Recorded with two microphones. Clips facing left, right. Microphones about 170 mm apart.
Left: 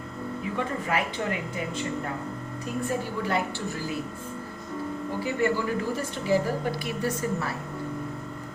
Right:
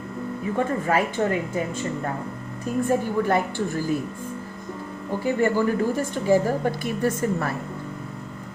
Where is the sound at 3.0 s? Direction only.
50° right (ahead or behind).